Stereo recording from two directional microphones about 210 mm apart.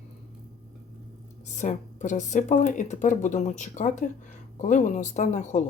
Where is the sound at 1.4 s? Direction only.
35° left (ahead or behind).